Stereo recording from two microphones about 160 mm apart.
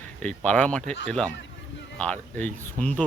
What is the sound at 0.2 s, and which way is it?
Speech, 5° left (ahead or behind).